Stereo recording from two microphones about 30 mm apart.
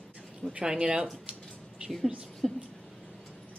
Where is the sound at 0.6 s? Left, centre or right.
Right.